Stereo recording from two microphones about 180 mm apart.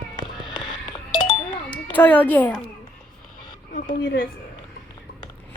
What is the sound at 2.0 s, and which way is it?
Speech, 10° left (ahead or behind).